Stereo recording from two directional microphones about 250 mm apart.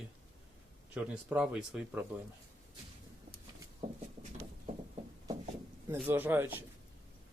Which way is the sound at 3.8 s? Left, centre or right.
Right.